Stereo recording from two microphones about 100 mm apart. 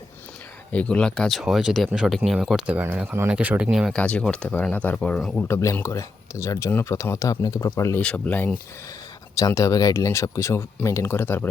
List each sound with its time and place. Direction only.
0.7 s speech: 10° left (ahead or behind)
3.2 s speech: 15° right (ahead or behind)
3.9 s speech: 10° left (ahead or behind)
4.9 s speech: 5° left (ahead or behind)
5.5 s speech: 30° left (ahead or behind)
8.0 s speech: 15° left (ahead or behind)
9.6 s speech: 35° left (ahead or behind)